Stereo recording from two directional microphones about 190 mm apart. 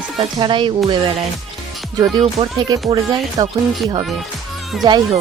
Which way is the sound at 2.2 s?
30° right (ahead or behind).